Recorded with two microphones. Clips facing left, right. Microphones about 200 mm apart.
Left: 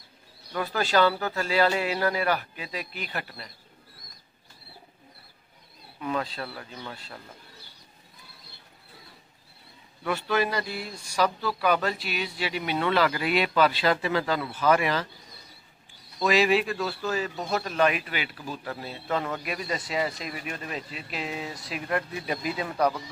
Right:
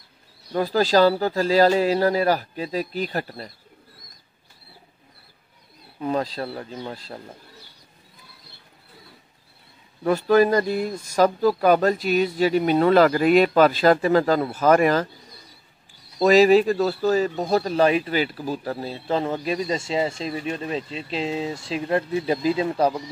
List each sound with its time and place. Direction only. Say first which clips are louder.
0.5 s speech: right 7 dB; 35° right (ahead or behind)
5.9 s speech: right 6 dB; 35° right (ahead or behind)
10.0 s speech: right 9 dB; 40° right (ahead or behind)
16.2 s speech: right 8 dB; 40° right (ahead or behind)